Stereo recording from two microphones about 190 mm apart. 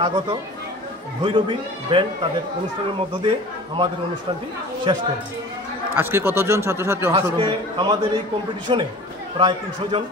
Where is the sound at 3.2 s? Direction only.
25° right (ahead or behind).